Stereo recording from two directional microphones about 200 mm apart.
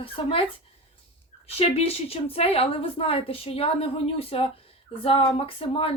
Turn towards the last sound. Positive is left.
turn(degrees=30)  # may be behind; listen again after turning